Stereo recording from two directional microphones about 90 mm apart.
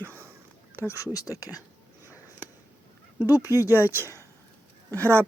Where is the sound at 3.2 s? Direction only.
20° right (ahead or behind).